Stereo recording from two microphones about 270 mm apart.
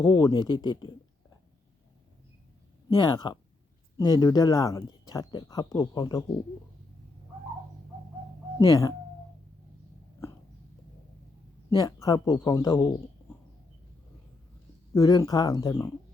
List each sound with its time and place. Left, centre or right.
0.0 s speech: centre
2.9 s speech: centre
8.5 s speech: centre
11.8 s speech: centre
14.9 s speech: centre